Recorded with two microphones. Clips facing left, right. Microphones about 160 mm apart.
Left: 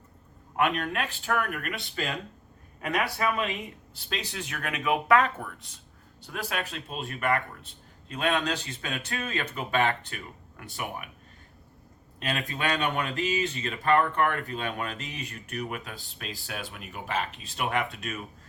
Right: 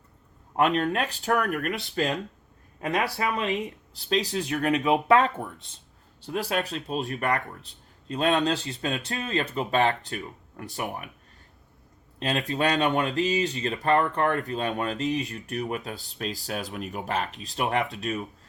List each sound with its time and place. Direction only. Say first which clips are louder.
0.5 s speech: right 4 dB; 35° right (ahead or behind)
12.2 s speech: right 5 dB; 35° right (ahead or behind)